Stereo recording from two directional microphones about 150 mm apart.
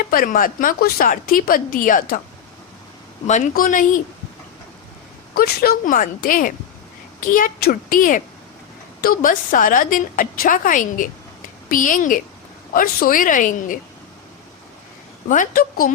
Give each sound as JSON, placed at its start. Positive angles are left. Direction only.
{"t": 0.1, "sound": "a woman's voice", "side_deg": 70}
{"t": 3.2, "sound": "a woman's voice", "side_deg": 55}
{"t": 5.3, "sound": "a woman's voice", "side_deg": 90}
{"t": 12.7, "sound": "a woman's voice", "side_deg": 70}
{"t": 15.3, "sound": "a woman's voice", "side_deg": 65}